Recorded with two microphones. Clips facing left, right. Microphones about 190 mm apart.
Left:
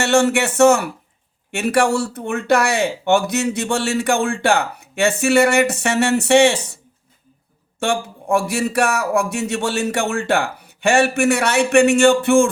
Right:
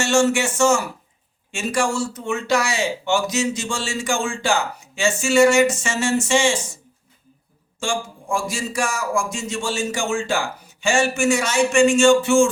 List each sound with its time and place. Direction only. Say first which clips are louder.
0.0 s speech: left 2 dB; 60° left (ahead or behind)
7.8 s speech: left 5 dB; 65° left (ahead or behind)